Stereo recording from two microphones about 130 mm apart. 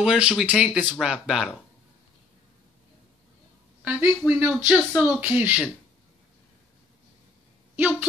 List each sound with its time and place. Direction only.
0.0 s speech: 5° right (ahead or behind)
3.8 s speech: 15° right (ahead or behind)
7.7 s a woman's voice: 15° right (ahead or behind)